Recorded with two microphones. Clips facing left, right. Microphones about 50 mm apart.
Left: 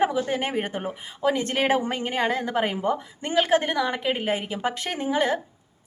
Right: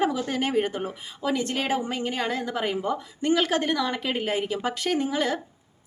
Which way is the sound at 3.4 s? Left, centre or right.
Centre.